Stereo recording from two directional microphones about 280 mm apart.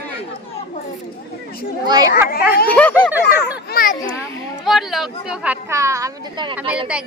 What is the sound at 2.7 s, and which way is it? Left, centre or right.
Speech, centre.